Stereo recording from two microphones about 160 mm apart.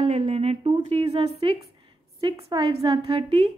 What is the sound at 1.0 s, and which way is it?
Speech, 25° right (ahead or behind).